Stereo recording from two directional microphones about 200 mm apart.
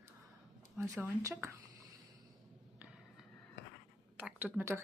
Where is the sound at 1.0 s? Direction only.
15° right (ahead or behind).